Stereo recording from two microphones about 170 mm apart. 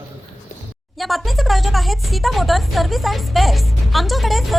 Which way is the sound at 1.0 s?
Centre (ahead or behind).